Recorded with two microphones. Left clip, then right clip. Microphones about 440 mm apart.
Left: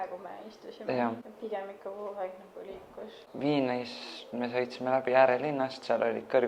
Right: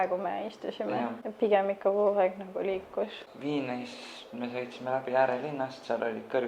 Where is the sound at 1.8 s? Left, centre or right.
Right.